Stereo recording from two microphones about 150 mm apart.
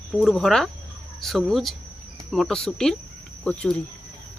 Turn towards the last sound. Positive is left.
turn(degrees=5)  # may be behind; listen again after turning